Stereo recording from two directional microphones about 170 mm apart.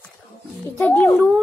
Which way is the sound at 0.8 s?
15° left (ahead or behind).